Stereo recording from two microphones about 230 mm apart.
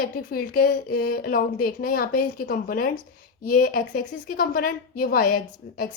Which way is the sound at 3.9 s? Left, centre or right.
Left.